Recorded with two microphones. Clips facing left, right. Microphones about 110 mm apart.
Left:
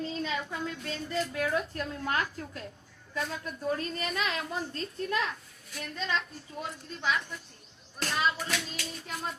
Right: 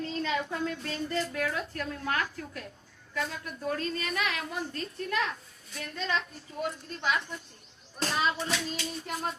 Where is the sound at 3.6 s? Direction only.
20° left (ahead or behind).